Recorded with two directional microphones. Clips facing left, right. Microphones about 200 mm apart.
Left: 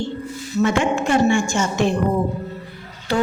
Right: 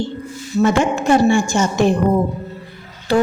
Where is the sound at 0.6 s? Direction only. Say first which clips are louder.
Right 3 dB; 40° right (ahead or behind).